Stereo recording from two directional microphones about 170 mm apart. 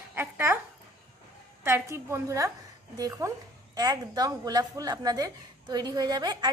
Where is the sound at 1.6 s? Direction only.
15° right (ahead or behind).